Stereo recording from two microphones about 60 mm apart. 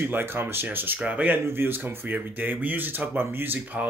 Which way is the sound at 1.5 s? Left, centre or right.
Right.